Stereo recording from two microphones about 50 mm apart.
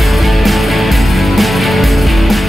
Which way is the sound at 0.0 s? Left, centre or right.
Centre.